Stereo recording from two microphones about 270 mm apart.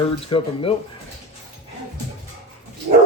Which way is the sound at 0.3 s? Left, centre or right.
Centre.